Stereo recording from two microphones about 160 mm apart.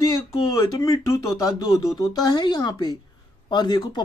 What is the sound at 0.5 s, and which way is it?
A woman's voice, 20° left (ahead or behind).